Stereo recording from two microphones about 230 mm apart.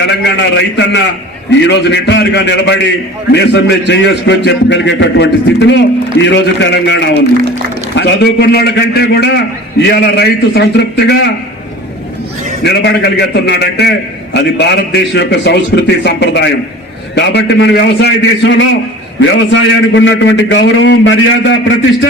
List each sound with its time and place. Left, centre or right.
0.1 s a man's voice: left
12.6 s a man's voice: left